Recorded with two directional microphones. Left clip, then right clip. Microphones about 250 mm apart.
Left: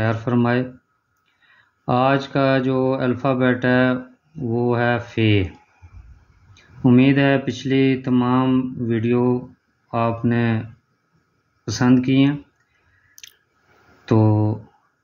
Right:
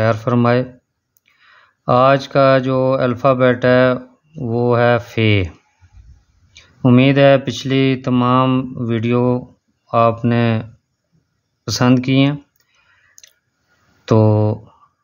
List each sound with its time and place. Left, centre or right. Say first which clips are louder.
0.0 s speech: right 6 dB; right
1.9 s speech: right 6 dB; right
6.5 s speech: right 3 dB; right
11.6 s speech: right 3 dB; right
14.0 s speech: right 5 dB; right